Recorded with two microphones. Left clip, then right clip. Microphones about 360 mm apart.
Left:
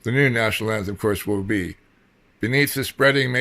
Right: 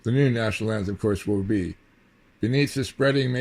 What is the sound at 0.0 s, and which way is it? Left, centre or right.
Speech, left.